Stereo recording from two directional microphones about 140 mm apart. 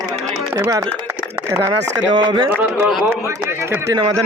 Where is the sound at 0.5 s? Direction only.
20° right (ahead or behind).